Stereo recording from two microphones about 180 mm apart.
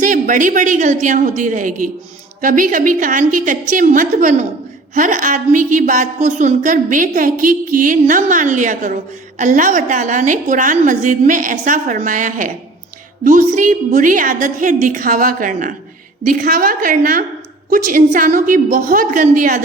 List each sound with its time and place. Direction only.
0.0 s a woman's voice: 45° right (ahead or behind)